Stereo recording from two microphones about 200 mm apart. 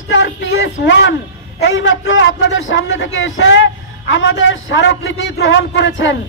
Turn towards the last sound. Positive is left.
turn(degrees=65)  # may be behind; listen again after turning